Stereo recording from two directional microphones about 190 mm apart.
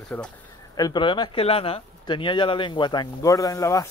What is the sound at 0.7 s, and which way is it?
Speech, 20° left (ahead or behind).